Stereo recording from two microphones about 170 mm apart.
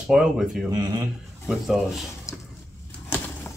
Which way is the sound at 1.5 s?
Centre (ahead or behind).